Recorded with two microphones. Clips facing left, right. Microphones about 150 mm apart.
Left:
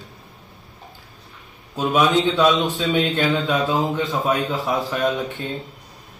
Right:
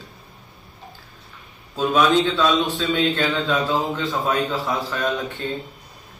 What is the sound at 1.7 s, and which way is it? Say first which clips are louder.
A man's voice: even; 20° left (ahead or behind).